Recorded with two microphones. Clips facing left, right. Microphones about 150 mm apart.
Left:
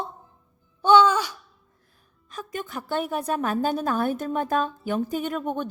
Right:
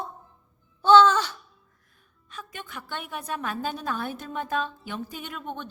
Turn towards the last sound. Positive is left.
turn(degrees=45)  # may be behind; listen again after turning